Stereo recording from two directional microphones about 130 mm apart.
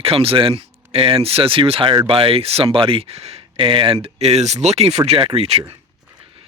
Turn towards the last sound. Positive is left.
turn(degrees=-50)  # may be behind; listen again after turning